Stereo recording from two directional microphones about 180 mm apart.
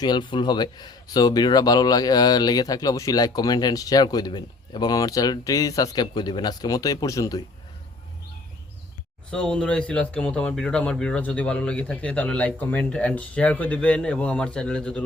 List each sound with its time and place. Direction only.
0.0 s speech: 25° left (ahead or behind)
9.3 s speech: 5° left (ahead or behind)